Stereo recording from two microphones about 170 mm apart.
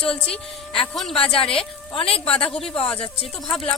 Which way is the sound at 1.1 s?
35° left (ahead or behind).